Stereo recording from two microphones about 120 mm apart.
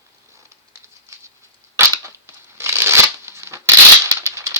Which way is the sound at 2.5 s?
20° right (ahead or behind).